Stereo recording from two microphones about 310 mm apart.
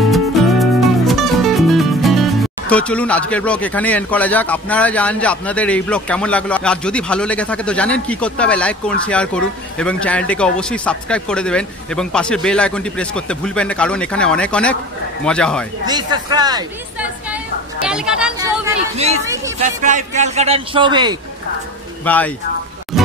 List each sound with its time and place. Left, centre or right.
0.1 s music: centre
2.7 s speech: centre
15.8 s speech: centre
17.8 s a sound: centre
18.9 s a man's voice: right
22.0 s speech: centre
22.9 s music: centre